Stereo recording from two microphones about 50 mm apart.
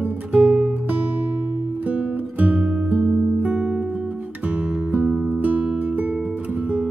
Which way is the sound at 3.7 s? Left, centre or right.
Right.